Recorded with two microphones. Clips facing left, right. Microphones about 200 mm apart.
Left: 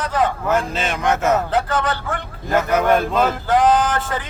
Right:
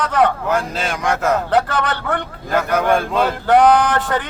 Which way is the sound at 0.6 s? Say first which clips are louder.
Even; 10° right (ahead or behind).